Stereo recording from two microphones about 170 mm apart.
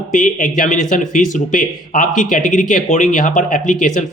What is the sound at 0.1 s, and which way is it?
Speech, 50° left (ahead or behind).